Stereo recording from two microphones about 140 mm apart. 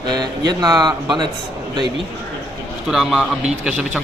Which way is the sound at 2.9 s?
Centre (ahead or behind).